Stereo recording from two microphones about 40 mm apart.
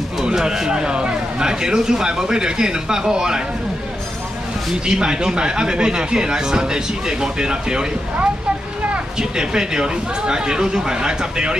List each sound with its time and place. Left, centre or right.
0.2 s a man's voice: centre
4.8 s speech: centre